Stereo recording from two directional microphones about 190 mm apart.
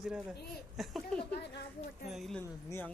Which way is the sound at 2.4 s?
10° left (ahead or behind).